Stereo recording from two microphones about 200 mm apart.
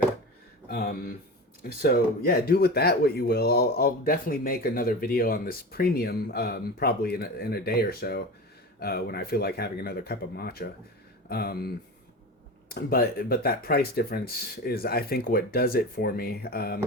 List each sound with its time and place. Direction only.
0.7 s speech: 50° left (ahead or behind)
12.7 s speech: 50° left (ahead or behind)